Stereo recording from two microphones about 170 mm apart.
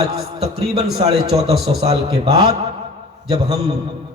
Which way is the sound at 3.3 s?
35° right (ahead or behind).